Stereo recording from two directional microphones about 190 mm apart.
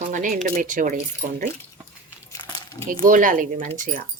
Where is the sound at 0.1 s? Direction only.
45° right (ahead or behind).